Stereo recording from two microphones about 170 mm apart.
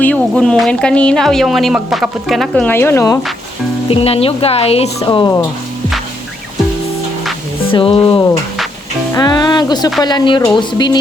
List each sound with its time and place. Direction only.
0.0 s speech: 5° left (ahead or behind)
2.6 s speech: 15° left (ahead or behind)
3.8 s speech: 35° left (ahead or behind)
4.9 s speech: 25° left (ahead or behind)
7.7 s speech: 30° left (ahead or behind)
9.1 s speech: 20° left (ahead or behind)